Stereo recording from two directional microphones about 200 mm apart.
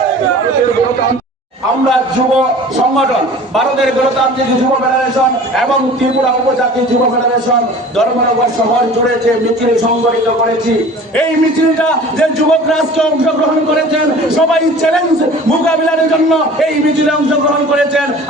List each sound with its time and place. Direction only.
3.5 s a man's voice: centre (ahead or behind)
12.5 s a man's voice: centre (ahead or behind)